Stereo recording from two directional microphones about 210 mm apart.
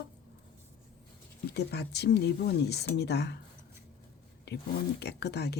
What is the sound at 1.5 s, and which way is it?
Speech, 55° left (ahead or behind).